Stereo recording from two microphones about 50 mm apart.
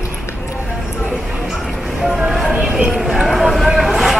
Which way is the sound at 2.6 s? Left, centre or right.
Centre.